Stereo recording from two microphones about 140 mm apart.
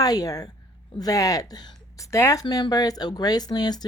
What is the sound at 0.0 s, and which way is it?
Speech, 25° left (ahead or behind).